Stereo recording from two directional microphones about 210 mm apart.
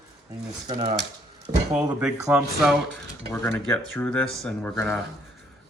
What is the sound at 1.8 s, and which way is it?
Speech, 15° right (ahead or behind).